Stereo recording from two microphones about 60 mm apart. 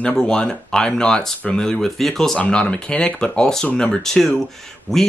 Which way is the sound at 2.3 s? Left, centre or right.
Centre.